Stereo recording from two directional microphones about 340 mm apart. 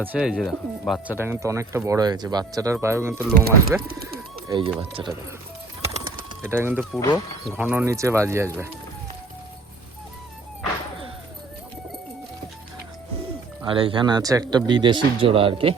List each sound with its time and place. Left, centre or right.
0.0 s speech: centre
3.4 s speech: right
4.4 s speech: centre
6.4 s speech: centre
13.7 s speech: centre